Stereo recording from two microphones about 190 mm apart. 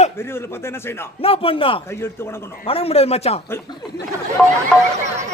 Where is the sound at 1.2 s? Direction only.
30° left (ahead or behind).